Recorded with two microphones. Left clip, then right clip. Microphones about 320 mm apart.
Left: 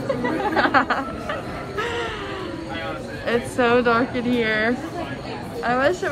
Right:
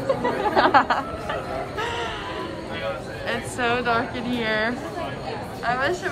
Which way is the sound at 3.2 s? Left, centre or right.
Centre.